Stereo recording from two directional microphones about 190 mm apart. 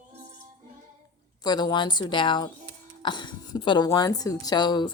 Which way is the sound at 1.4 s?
20° left (ahead or behind).